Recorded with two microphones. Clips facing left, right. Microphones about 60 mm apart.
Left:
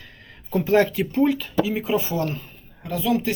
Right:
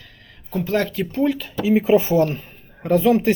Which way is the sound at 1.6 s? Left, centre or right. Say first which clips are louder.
Right 9 dB; right.